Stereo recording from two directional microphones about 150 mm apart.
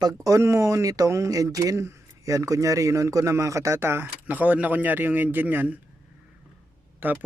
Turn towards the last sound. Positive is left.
turn(degrees=-10)  # may be behind; listen again after turning